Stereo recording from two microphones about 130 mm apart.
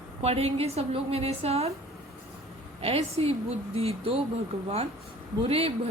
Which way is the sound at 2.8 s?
50° right (ahead or behind).